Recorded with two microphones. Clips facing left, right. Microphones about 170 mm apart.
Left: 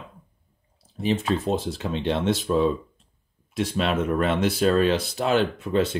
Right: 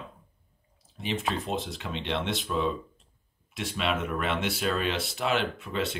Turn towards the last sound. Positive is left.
turn(degrees=40)  # may be behind; listen again after turning